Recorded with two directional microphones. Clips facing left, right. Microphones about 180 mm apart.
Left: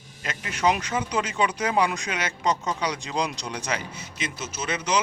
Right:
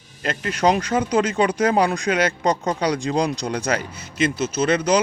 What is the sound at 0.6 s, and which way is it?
Speech, 35° right (ahead or behind).